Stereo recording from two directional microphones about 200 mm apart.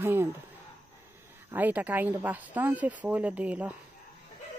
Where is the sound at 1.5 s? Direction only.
10° right (ahead or behind).